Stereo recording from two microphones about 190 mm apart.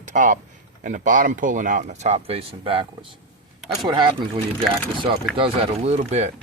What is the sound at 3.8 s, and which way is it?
Speech, 25° right (ahead or behind).